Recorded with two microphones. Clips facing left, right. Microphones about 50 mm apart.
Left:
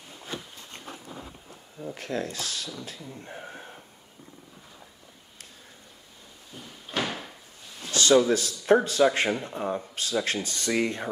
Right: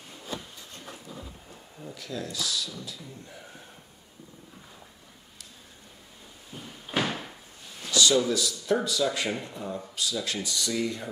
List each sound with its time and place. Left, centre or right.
2.0 s speech: left
6.5 s door: centre
7.9 s a sound: left
8.3 s speech: left